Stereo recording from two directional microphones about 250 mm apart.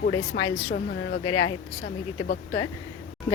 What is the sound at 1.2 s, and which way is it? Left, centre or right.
Speech, left.